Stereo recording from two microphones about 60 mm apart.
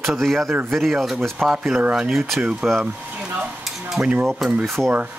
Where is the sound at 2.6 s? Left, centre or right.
Centre.